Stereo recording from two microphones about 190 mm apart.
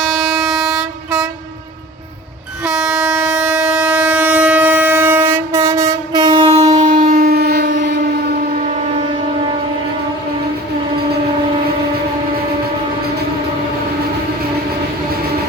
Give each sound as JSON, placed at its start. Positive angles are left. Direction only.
{"t": 0.3, "sound": "train", "side_deg": 0}
{"t": 2.6, "sound": "train", "side_deg": -5}
{"t": 6.7, "sound": "train", "side_deg": -45}